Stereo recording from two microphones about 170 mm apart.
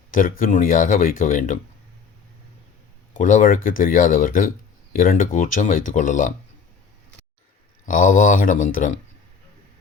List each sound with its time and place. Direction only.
0.1 s speech: 50° left (ahead or behind)
3.2 s speech: 50° left (ahead or behind)
7.9 s speech: 50° left (ahead or behind)